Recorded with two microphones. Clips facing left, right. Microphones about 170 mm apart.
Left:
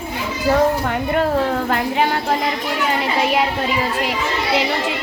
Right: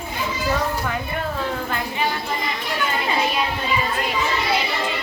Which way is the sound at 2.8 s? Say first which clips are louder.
Left 3 dB; 70° left (ahead or behind).